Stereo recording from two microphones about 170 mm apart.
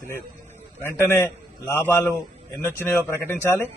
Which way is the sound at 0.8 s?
15° left (ahead or behind).